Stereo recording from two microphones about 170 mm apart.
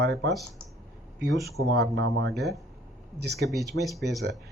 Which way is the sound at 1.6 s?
85° right.